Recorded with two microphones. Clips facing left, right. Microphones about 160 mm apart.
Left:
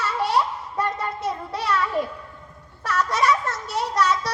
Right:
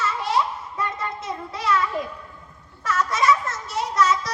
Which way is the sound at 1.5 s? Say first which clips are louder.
Right 3 dB; 35° left (ahead or behind).